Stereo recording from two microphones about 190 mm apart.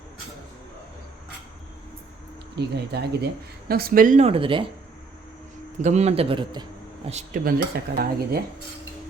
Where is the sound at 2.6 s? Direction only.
60° right (ahead or behind); by 4.6 s 25° right (ahead or behind).